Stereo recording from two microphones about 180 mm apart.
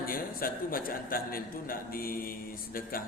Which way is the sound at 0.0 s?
55° left (ahead or behind).